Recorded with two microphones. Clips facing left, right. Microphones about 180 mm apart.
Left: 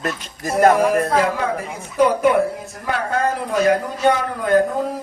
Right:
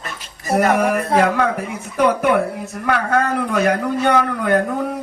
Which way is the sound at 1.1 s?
65° right (ahead or behind).